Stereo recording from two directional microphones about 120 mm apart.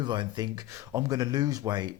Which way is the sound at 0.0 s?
40° right (ahead or behind).